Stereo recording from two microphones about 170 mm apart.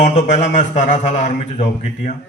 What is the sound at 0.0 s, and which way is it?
A man's voice, 45° left (ahead or behind).